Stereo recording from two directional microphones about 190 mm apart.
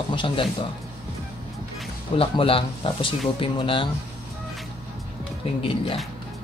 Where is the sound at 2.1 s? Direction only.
30° left (ahead or behind).